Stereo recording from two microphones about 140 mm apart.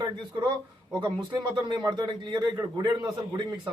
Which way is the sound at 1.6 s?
30° right (ahead or behind).